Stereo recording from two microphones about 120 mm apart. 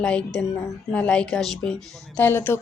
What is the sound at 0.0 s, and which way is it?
A woman's voice, 10° left (ahead or behind).